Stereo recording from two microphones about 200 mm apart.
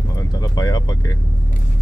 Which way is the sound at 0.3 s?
20° left (ahead or behind).